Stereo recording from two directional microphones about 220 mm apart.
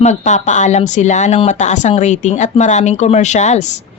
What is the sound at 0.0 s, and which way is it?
Speech, 30° left (ahead or behind).